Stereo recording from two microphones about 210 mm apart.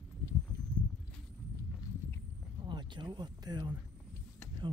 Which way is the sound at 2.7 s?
20° right (ahead or behind).